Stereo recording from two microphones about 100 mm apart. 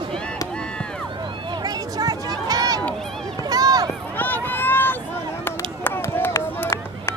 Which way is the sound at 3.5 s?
40° right (ahead or behind).